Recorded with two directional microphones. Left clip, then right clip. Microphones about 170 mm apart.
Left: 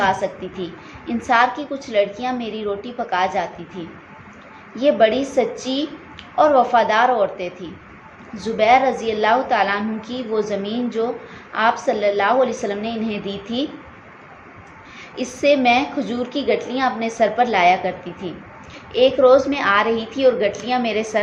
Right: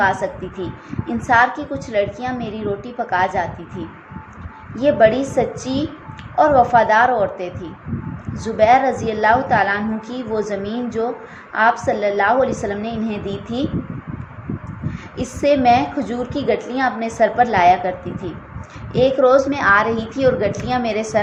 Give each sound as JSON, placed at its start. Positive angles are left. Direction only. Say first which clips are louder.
{"t": 0.0, "sound": "a woman's voice", "louder": "right 1 dB", "side_deg": -30}
{"t": 4.7, "sound": "a woman's voice", "louder": "right 2 dB", "side_deg": -30}
{"t": 15.1, "sound": "a woman's voice", "louder": "even", "side_deg": -30}